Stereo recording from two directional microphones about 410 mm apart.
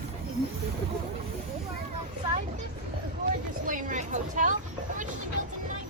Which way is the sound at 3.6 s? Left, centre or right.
Centre.